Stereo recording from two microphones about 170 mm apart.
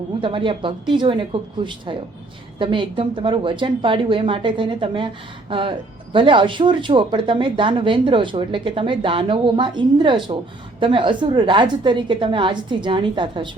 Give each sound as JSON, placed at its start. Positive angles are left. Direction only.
{"t": 0.2, "sound": "a woman's voice", "side_deg": -30}